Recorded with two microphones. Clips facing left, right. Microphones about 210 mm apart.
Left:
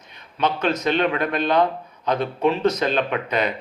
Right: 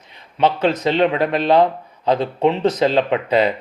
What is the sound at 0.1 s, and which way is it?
Speech, 25° right (ahead or behind).